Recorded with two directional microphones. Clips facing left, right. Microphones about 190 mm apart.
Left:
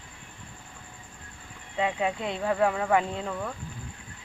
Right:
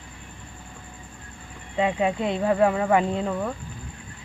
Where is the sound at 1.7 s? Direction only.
10° right (ahead or behind).